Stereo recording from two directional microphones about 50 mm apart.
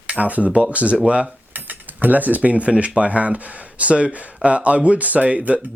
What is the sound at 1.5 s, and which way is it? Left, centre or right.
Speech, right.